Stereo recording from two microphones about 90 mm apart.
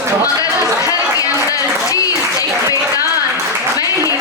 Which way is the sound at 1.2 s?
40° left (ahead or behind).